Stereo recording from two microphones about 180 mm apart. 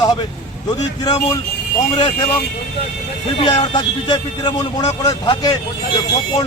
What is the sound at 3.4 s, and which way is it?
Speech, 25° left (ahead or behind).